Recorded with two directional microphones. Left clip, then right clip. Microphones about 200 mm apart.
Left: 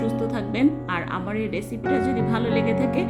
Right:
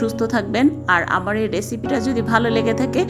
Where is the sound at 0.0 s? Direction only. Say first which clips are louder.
Right 6 dB; 15° right (ahead or behind).